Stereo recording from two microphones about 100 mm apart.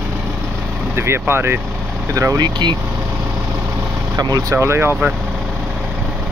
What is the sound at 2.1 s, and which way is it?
Speech, 35° right (ahead or behind).